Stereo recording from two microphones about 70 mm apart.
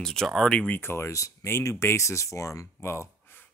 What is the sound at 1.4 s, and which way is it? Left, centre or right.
Speech, left.